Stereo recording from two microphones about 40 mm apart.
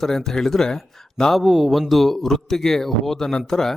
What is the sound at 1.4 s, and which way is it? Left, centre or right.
Speech, centre.